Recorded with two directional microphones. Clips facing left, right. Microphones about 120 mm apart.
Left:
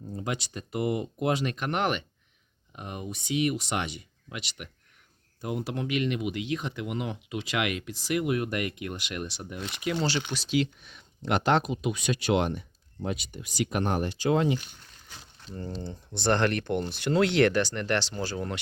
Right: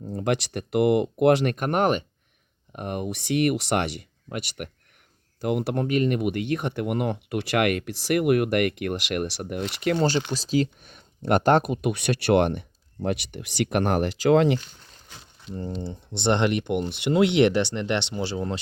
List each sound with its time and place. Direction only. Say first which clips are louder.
0.1 s speech: right 8 dB; 70° right (ahead or behind)
1.5 s speech: right 6 dB; 45° right (ahead or behind)
2.7 s speech: right 8 dB; 60° right (ahead or behind)
4.3 s speech: right 7 dB; 55° right (ahead or behind)
5.4 s speech: right 7 dB; 70° right (ahead or behind)
5.8 s speech: right 4 dB; 45° right (ahead or behind); by 15.6 s 70° right (ahead or behind)
15.8 s speech: right 4 dB; 25° right (ahead or behind)